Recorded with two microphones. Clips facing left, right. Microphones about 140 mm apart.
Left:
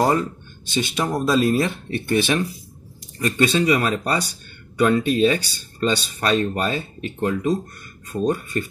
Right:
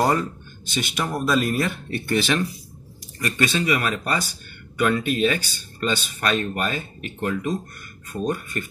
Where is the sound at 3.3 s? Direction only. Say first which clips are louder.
Left 4 dB; 30° left (ahead or behind).